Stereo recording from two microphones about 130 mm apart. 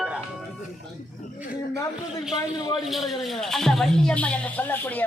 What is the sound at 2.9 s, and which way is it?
A man's voice, centre (ahead or behind).